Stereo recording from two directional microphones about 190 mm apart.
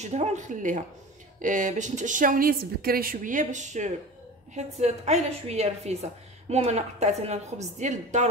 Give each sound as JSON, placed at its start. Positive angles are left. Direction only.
{"t": 0.0, "sound": "a woman's voice", "side_deg": -40}